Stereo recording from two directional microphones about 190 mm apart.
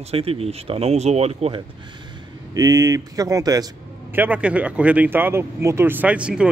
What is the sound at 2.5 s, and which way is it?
Speech, 20° right (ahead or behind).